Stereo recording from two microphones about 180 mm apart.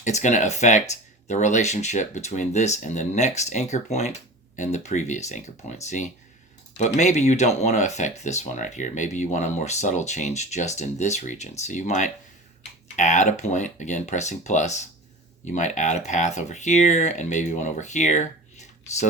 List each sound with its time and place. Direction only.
0.0 s speech: 40° left (ahead or behind)